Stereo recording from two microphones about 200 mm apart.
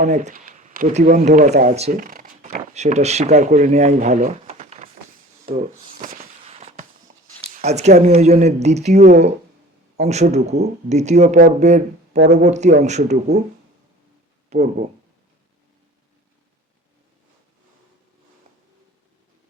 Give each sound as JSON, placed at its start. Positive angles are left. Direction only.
{"t": 0.0, "sound": "speech", "side_deg": -40}
{"t": 5.5, "sound": "a sound", "side_deg": -45}
{"t": 6.4, "sound": "fireworks", "side_deg": -30}
{"t": 7.5, "sound": "speech", "side_deg": -35}
{"t": 14.5, "sound": "speech", "side_deg": -35}